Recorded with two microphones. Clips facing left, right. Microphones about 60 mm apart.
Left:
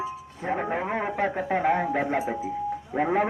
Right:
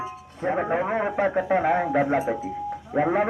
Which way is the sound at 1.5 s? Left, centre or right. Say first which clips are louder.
Right 1 dB; centre.